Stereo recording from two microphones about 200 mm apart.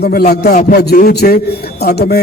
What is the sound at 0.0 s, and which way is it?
A man's voice, 50° left (ahead or behind).